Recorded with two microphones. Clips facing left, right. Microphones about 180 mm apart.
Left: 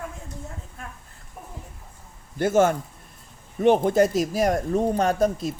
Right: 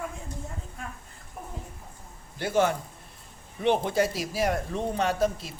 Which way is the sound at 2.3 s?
50° left (ahead or behind).